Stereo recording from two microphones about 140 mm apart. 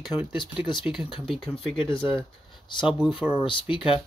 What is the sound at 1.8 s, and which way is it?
Speech, 35° left (ahead or behind).